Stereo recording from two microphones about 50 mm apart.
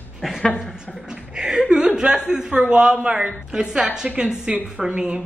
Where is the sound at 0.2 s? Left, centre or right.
Centre.